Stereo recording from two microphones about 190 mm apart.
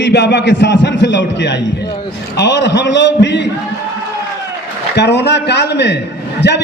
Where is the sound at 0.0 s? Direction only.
65° left (ahead or behind).